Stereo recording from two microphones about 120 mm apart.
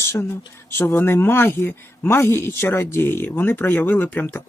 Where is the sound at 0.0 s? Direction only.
20° left (ahead or behind).